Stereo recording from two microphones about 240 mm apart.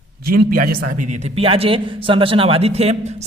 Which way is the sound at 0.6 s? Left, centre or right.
Right.